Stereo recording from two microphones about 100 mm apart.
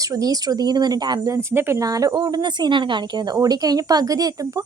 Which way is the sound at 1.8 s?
35° right (ahead or behind).